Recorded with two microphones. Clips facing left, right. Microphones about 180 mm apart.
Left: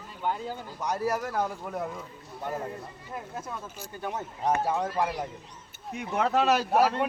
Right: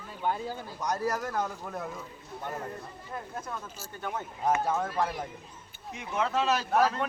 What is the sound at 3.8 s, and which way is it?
A man's voice, 15° left (ahead or behind).